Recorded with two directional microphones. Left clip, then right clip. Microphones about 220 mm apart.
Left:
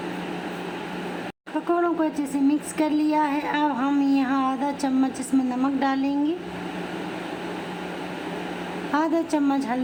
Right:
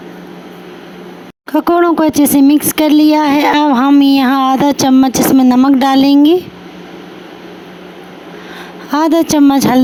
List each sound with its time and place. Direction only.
1.6 s speech: 45° right (ahead or behind)
8.9 s speech: 45° right (ahead or behind)